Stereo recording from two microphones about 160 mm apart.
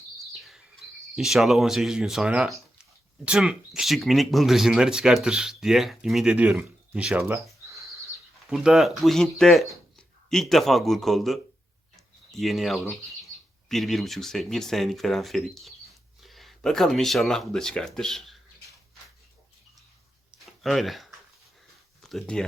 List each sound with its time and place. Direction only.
0.3 s bird: centre (ahead or behind)
1.1 s speech: centre (ahead or behind)
7.2 s a sound: 15° right (ahead or behind)
8.4 s speech: 5° right (ahead or behind)
20.4 s a sound: centre (ahead or behind)
22.0 s speech: 5° left (ahead or behind)